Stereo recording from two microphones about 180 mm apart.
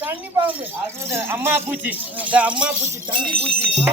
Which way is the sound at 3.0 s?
25° right (ahead or behind).